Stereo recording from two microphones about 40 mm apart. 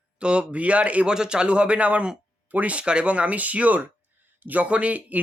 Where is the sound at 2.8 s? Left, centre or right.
Right.